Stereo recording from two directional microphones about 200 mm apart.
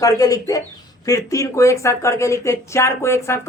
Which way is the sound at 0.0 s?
15° left (ahead or behind).